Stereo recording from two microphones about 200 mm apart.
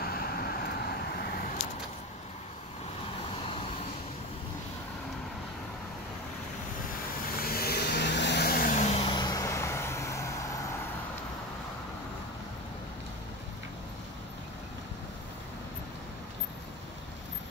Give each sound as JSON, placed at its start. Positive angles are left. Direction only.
{"t": 0.0, "sound": "vehicle", "side_deg": 50}
{"t": 7.3, "sound": "vehicle", "side_deg": 50}